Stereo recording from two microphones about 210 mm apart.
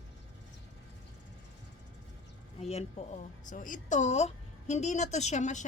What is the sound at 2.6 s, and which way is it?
A woman's voice, 30° left (ahead or behind).